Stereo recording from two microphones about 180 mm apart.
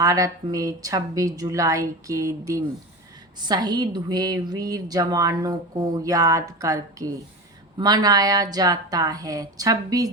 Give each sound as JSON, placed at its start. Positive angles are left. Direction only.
{"t": 0.0, "sound": "a woman's voice", "side_deg": -20}